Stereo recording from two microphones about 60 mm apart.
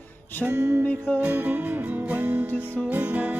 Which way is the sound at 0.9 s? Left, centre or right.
Left.